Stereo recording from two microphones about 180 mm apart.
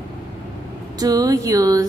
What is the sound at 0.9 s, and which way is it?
Speech, 20° right (ahead or behind).